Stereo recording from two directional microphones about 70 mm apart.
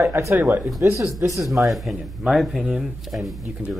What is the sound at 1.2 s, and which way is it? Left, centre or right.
Speech, right.